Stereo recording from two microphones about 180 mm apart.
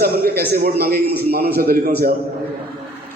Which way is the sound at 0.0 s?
60° right (ahead or behind).